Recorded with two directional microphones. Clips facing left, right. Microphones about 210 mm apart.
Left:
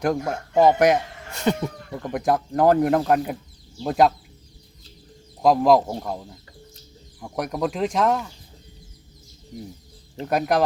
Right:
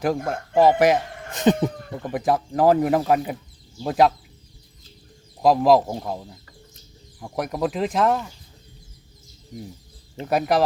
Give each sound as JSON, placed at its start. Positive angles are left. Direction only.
{"t": 0.0, "sound": "speech", "side_deg": 0}
{"t": 1.3, "sound": "a sound", "side_deg": -20}
{"t": 2.0, "sound": "speech", "side_deg": 0}
{"t": 5.4, "sound": "speech", "side_deg": 0}
{"t": 10.2, "sound": "speech", "side_deg": 0}